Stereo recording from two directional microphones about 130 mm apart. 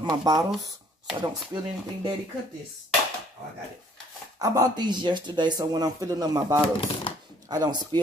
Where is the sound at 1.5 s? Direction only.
30° right (ahead or behind).